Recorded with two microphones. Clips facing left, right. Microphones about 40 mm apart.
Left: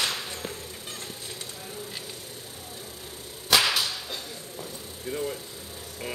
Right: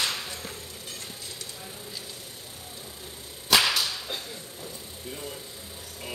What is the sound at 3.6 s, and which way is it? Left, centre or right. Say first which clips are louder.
Whip: even; centre.